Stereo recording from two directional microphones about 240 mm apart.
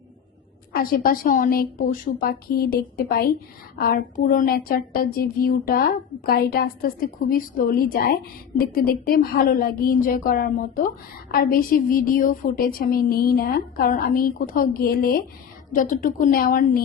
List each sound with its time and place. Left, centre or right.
0.7 s a woman's voice: left